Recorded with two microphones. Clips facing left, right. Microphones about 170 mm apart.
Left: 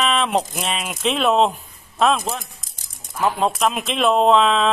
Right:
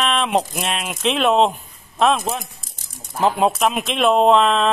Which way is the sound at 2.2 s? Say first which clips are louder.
Right 2 dB; 20° right (ahead or behind).